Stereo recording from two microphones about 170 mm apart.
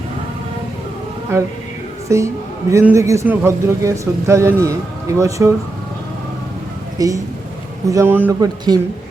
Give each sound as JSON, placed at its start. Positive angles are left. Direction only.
{"t": 1.3, "sound": "a man's voice", "side_deg": -15}
{"t": 7.0, "sound": "a man's voice", "side_deg": -20}
{"t": 8.4, "sound": "a man's voice", "side_deg": -25}